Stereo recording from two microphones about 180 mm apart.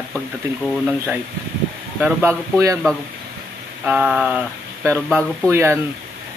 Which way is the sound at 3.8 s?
10° right (ahead or behind).